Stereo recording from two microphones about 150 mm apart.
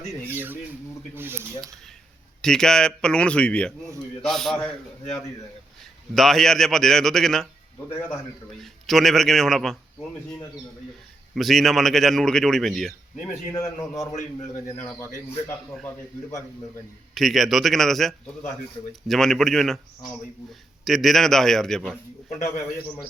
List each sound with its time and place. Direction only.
0.3 s speech: 15° right (ahead or behind)
2.4 s a man's voice: 5° left (ahead or behind)
6.1 s a man's voice: centre (ahead or behind)
7.9 s a man's voice: 15° left (ahead or behind)
8.6 s a man's voice: centre (ahead or behind)
11.3 s a man's voice: centre (ahead or behind)
13.5 s a man's voice: 20° left (ahead or behind)
17.2 s a man's voice: centre (ahead or behind)